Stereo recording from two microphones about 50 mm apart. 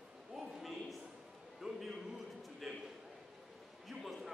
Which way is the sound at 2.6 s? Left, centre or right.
Centre.